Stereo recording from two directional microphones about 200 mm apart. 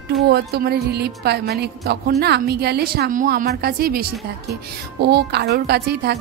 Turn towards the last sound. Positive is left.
turn(degrees=-55)  # may be behind; listen again after turning